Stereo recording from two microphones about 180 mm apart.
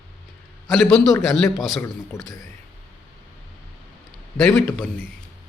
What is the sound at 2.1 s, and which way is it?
Speech, 15° left (ahead or behind).